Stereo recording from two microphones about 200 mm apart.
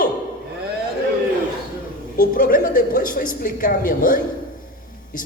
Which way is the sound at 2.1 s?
45° left (ahead or behind).